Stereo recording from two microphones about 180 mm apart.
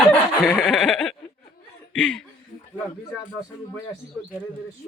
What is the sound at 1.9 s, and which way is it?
Speech, 5° left (ahead or behind).